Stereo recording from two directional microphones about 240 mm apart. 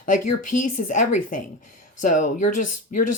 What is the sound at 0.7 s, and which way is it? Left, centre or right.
Speech, left.